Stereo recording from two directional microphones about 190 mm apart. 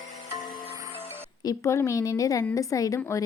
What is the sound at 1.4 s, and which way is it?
A woman's voice, 15° left (ahead or behind).